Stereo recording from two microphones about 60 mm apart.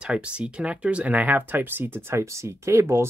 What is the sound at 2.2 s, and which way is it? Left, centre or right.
Speech, right.